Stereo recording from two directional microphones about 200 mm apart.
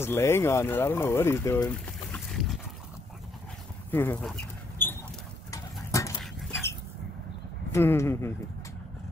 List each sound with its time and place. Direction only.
0.0 s speech: 10° left (ahead or behind)
3.9 s dog: 10° left (ahead or behind)
5.5 s pigeon: 15° left (ahead or behind)
7.7 s speech: 10° left (ahead or behind)